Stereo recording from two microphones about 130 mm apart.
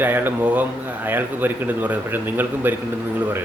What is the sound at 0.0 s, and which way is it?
Speech, 15° right (ahead or behind).